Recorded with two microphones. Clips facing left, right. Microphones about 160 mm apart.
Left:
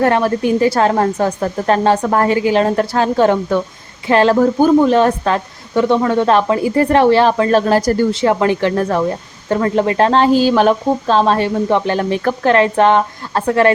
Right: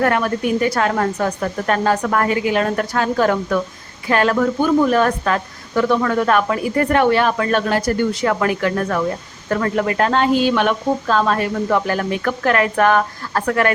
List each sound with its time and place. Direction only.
0.0 s a woman's voice: 30° left (ahead or behind)